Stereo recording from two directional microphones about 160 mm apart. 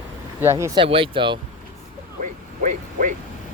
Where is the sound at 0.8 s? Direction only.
35° right (ahead or behind).